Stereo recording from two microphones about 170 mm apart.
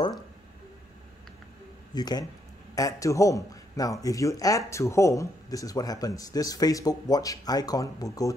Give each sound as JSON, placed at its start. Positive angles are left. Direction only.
{"t": 2.0, "sound": "a man's voice", "side_deg": 25}